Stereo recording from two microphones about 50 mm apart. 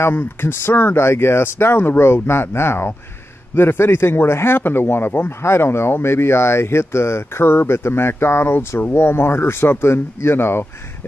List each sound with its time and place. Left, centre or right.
0.4 s speech: left
8.9 s speech: left